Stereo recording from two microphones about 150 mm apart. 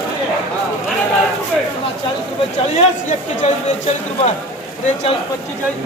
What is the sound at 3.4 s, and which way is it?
Speech, 50° left (ahead or behind).